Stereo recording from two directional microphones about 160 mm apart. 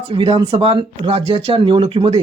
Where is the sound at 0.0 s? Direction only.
35° right (ahead or behind).